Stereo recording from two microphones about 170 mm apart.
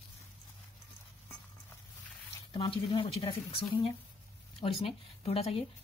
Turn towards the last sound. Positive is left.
turn(degrees=35)  # may be behind; listen again after turning